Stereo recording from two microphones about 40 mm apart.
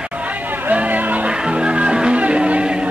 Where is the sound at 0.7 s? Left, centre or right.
Right.